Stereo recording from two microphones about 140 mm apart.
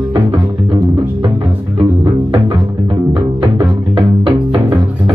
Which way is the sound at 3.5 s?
35° right (ahead or behind).